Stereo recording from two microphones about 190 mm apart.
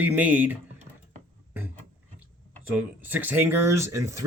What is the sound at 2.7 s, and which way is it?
Speech, 10° right (ahead or behind).